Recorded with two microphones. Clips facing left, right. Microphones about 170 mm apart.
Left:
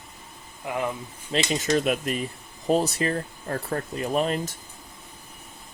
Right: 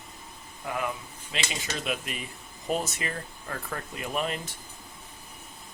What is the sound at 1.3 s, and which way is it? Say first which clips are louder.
Speech: left 11 dB; 45° left (ahead or behind).